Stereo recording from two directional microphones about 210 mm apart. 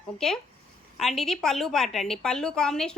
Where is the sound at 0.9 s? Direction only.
Centre (ahead or behind).